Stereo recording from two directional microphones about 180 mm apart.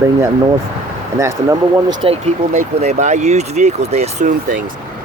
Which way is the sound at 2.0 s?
35° right (ahead or behind).